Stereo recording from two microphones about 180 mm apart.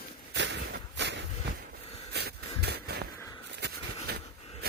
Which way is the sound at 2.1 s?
65° right (ahead or behind).